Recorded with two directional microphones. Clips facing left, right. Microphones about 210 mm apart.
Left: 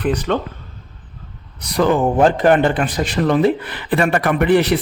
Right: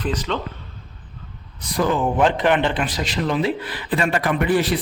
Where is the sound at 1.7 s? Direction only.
65° left (ahead or behind).